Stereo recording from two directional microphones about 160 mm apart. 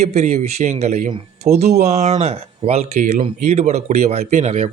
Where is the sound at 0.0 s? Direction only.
45° right (ahead or behind).